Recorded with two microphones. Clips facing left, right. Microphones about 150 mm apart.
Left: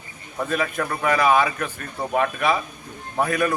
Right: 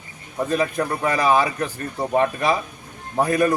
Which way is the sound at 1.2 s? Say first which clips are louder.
Right 1 dB; 35° right (ahead or behind).